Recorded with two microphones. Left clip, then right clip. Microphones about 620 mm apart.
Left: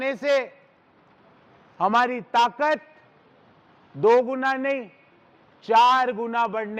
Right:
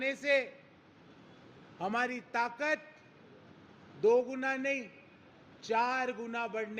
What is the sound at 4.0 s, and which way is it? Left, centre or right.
Speech, left.